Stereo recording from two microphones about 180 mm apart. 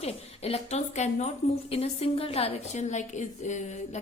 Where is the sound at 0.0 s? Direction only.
35° left (ahead or behind).